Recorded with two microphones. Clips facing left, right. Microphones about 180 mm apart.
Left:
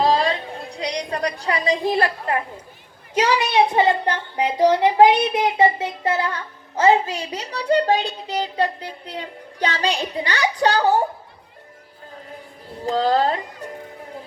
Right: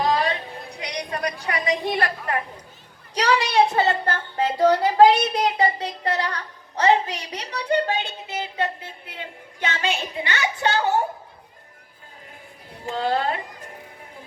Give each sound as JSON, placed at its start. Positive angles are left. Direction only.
{"t": 0.0, "sound": "a sound", "side_deg": 30}
{"t": 1.9, "sound": "speech", "side_deg": 30}
{"t": 12.8, "sound": "speech", "side_deg": 35}